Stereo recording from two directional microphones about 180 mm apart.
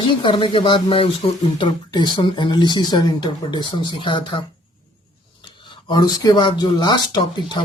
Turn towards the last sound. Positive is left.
turn(degrees=25)  # may be behind; listen again after turning